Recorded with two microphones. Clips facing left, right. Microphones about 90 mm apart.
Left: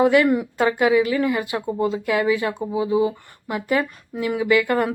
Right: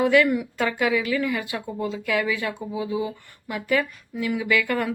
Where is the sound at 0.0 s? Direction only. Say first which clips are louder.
Left 3 dB; 30° left (ahead or behind).